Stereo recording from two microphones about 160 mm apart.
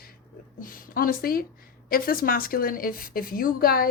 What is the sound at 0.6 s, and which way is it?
Speech, 60° left (ahead or behind).